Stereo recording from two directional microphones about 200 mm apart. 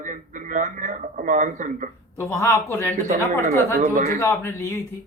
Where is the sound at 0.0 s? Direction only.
40° right (ahead or behind).